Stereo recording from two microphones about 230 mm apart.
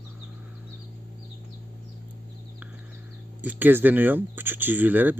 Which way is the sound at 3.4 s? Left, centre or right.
Centre.